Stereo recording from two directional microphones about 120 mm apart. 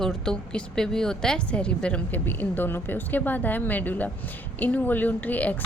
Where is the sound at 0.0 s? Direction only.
5° left (ahead or behind).